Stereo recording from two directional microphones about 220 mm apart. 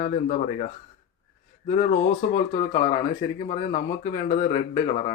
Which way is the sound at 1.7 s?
35° left (ahead or behind).